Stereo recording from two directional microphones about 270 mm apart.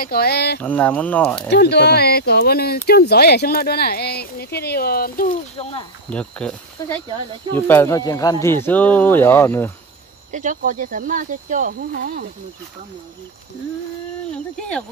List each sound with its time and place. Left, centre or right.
0.0 s speech: left
0.6 s speech: centre
1.5 s speech: left
6.0 s speech: centre
10.3 s speech: right
14.3 s speech: centre